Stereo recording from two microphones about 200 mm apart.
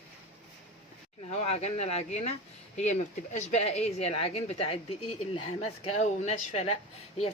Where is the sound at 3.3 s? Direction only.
35° left (ahead or behind).